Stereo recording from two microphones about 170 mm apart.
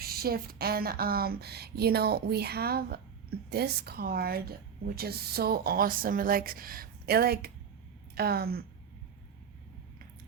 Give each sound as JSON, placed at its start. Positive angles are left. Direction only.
{"t": 0.0, "sound": "speech", "side_deg": -65}